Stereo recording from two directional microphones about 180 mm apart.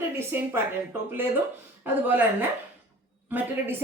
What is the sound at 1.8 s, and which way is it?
Speech, 10° right (ahead or behind).